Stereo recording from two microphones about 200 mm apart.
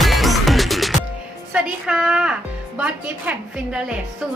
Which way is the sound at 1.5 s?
Centre (ahead or behind).